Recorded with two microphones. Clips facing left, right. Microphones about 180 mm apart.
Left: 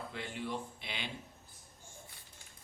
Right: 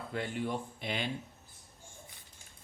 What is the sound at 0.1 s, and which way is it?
Speech, 50° right (ahead or behind).